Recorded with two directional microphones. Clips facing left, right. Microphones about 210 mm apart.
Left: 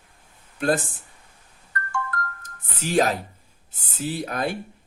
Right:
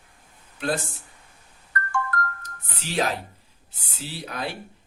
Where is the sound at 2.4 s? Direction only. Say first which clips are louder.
Left 6 dB; 45° left (ahead or behind).